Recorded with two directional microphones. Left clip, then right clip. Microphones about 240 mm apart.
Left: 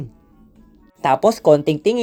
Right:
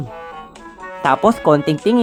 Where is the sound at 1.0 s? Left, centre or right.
Centre.